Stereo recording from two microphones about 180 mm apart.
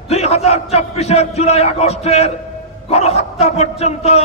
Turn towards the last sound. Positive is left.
turn(degrees=35)  # may be behind; listen again after turning